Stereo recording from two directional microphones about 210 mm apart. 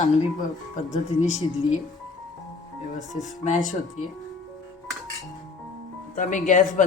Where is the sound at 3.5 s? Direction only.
40° left (ahead or behind).